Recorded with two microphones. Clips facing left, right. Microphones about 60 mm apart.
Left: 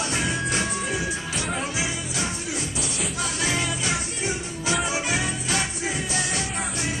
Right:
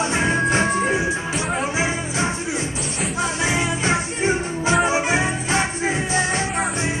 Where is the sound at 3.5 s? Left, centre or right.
Right.